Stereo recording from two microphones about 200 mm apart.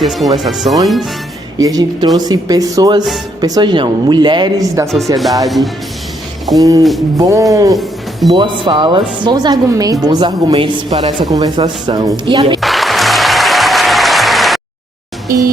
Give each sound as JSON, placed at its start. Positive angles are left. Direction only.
{"t": 0.0, "sound": "speech", "side_deg": 0}
{"t": 1.5, "sound": "speech", "side_deg": -20}
{"t": 6.6, "sound": "music", "side_deg": -15}
{"t": 8.3, "sound": "speech", "side_deg": -25}
{"t": 12.5, "sound": "applause", "side_deg": 0}